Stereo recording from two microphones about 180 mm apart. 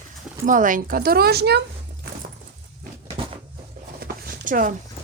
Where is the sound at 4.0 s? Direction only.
50° right (ahead or behind).